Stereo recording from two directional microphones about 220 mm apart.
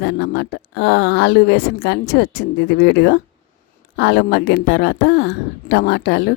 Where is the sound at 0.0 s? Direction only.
50° left (ahead or behind).